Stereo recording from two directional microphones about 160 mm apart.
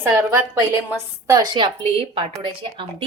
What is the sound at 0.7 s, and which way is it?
A woman's voice, 20° right (ahead or behind).